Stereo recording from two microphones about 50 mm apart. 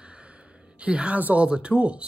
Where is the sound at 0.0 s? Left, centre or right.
Right.